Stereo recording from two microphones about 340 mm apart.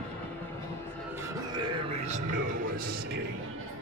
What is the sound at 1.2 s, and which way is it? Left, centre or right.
Music, centre.